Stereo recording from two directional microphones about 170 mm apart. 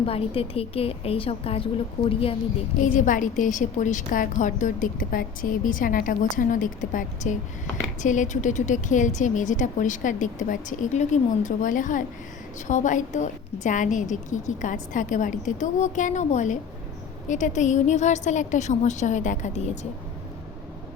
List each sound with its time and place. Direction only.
0.0 s a woman's voice: 35° left (ahead or behind)
2.8 s a woman's voice: 50° left (ahead or behind)